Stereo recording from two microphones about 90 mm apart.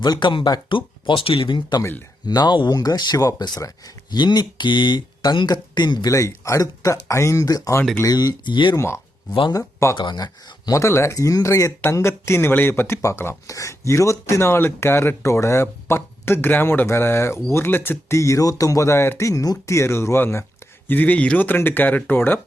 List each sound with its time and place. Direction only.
0.0 s speech: 55° left (ahead or behind)
0.8 s speech: 75° left (ahead or behind)
1.8 s speech: 25° left (ahead or behind)
2.2 s speech: 50° left (ahead or behind)
6.1 s speech: 35° left (ahead or behind); by 8.7 s 60° left (ahead or behind)
8.7 s speech: 30° left (ahead or behind)
10.0 s speech: 55° left (ahead or behind); by 22.4 s 20° left (ahead or behind)